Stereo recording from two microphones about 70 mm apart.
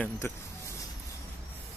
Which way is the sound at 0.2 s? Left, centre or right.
Left.